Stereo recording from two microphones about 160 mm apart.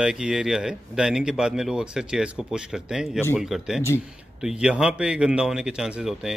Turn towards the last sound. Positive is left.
turn(degrees=-5)  # may be behind; listen again after turning